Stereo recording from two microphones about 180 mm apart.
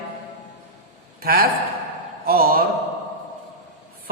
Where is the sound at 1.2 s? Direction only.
55° right (ahead or behind).